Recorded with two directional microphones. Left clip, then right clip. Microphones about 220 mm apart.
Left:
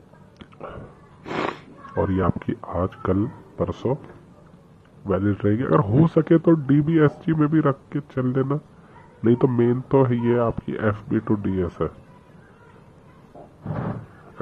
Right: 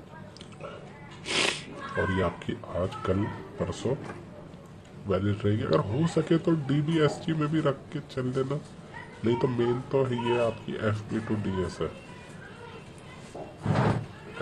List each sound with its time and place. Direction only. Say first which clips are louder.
1.2 s cat: even; 5° left (ahead or behind)
2.0 s speech: left 5 dB; 15° left (ahead or behind)
5.0 s speech: left 6 dB; 15° left (ahead or behind)